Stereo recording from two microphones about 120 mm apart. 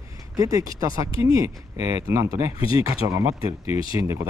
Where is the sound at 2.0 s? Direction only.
25° right (ahead or behind).